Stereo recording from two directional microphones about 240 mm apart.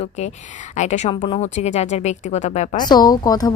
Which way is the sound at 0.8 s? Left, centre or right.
Left.